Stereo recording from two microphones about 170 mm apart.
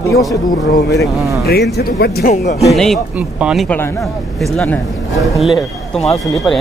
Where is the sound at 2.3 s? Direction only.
50° left (ahead or behind).